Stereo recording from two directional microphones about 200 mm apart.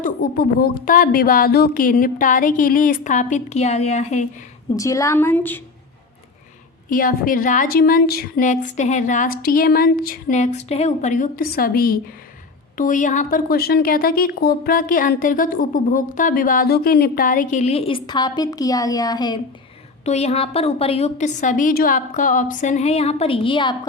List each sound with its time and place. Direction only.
0.0 s speech: 45° left (ahead or behind)
4.8 s a woman's voice: 15° left (ahead or behind)
6.9 s a woman's voice: 45° left (ahead or behind); by 19.4 s 20° left (ahead or behind)
20.1 s speech: 30° left (ahead or behind)